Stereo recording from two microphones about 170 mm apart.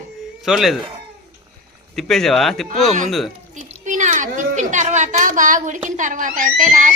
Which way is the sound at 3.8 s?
50° right (ahead or behind).